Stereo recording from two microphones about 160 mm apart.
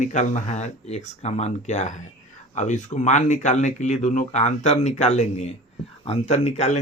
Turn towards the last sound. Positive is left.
turn(degrees=45)  # may be behind; listen again after turning